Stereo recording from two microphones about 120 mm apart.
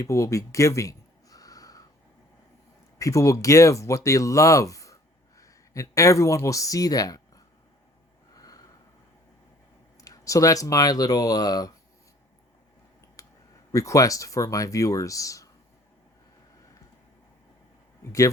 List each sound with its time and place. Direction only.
0.0 s a sound: 25° left (ahead or behind)
3.0 s speech: 25° left (ahead or behind)
8.4 s snort: 30° left (ahead or behind)
10.0 s speech: 25° left (ahead or behind)
13.2 s clicking: 30° left (ahead or behind)
13.7 s speech: 25° left (ahead or behind)